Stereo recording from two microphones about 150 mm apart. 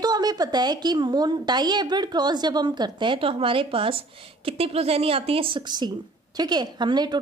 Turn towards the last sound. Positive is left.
turn(degrees=-30)  # may be behind; listen again after turning